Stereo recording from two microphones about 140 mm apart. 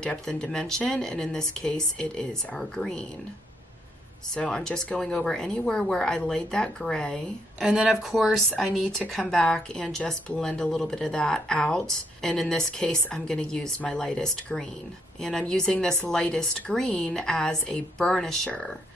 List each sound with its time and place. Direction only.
0.0 s speech: 5° left (ahead or behind)
4.4 s speech: 5° left (ahead or behind)